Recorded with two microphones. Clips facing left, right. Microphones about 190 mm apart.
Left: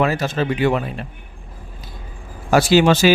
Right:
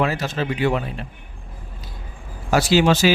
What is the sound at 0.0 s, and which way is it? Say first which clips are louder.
Speech: left 3 dB; 55° left (ahead or behind).